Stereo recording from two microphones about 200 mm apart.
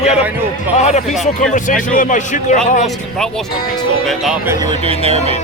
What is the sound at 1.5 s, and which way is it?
A man's voice, 40° left (ahead or behind).